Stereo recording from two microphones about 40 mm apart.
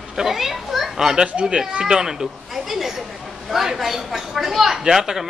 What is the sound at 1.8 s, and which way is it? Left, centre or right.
A man's voice, centre.